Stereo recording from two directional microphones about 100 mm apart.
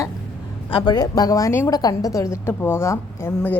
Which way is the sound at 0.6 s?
60° left (ahead or behind).